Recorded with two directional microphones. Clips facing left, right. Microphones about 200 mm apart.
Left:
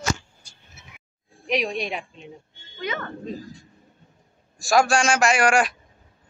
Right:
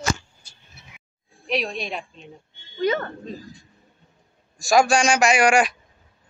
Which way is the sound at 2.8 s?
40° right (ahead or behind).